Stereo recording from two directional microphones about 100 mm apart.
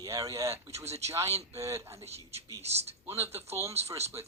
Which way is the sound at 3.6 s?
90° right.